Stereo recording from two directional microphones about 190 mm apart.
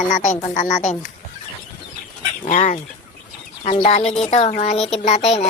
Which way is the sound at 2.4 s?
40° left (ahead or behind).